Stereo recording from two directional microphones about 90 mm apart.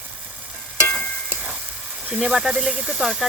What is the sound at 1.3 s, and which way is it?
Frying, 20° right (ahead or behind).